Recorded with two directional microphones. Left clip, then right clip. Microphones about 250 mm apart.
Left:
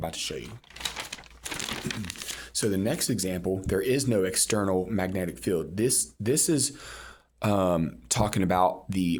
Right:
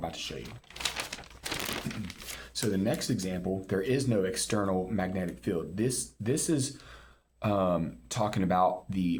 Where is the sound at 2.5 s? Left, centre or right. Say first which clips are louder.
Left 3 dB; left.